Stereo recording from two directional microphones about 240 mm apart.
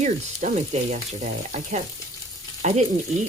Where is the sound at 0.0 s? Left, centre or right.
Right.